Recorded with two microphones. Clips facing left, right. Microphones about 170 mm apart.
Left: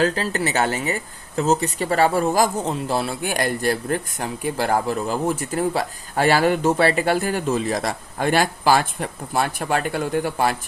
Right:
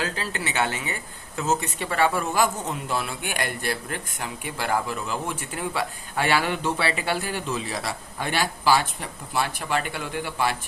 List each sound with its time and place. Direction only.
0.0 s speech: 40° left (ahead or behind)